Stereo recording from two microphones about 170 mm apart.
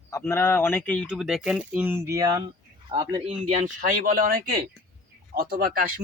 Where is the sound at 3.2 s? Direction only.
45° right (ahead or behind).